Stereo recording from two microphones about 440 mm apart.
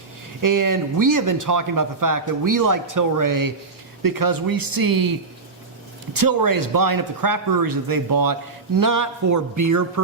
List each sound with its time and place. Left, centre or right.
0.4 s speech: right
6.1 s speech: right